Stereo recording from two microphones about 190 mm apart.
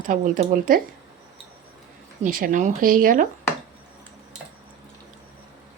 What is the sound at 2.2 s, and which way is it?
Speech, 45° right (ahead or behind).